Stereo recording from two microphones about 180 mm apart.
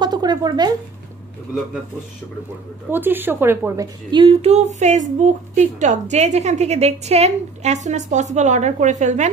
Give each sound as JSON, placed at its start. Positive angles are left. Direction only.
{"t": 0.0, "sound": "speech", "side_deg": -25}
{"t": 2.9, "sound": "a woman's voice", "side_deg": -10}